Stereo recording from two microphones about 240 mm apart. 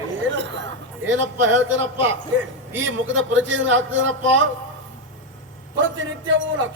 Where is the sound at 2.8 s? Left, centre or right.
Right.